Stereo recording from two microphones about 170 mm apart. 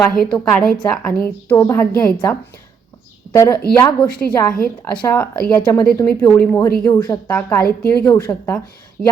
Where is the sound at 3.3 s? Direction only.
20° left (ahead or behind).